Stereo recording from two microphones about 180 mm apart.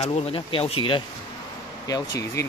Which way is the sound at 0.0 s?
30° left (ahead or behind).